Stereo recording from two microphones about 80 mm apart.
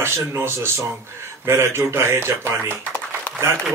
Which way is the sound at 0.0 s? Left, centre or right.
Right.